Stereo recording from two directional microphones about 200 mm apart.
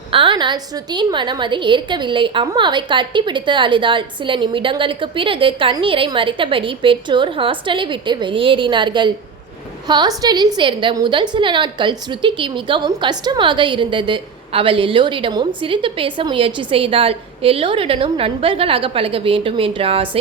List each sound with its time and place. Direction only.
0.1 s a woman's voice: 25° right (ahead or behind)